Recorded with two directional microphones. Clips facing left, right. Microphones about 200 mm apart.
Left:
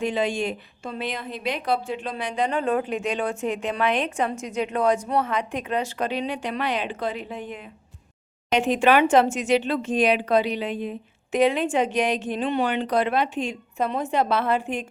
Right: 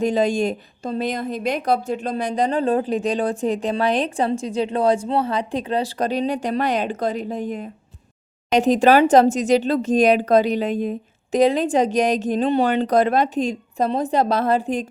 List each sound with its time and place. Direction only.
0.0 s a woman's voice: 40° right (ahead or behind)